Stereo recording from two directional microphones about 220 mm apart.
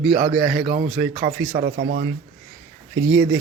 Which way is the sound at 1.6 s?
45° right (ahead or behind).